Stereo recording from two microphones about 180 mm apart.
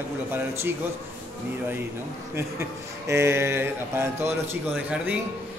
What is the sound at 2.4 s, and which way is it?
Speech, 15° right (ahead or behind).